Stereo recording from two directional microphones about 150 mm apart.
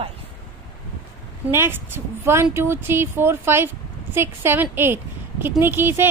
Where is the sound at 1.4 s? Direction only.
15° right (ahead or behind).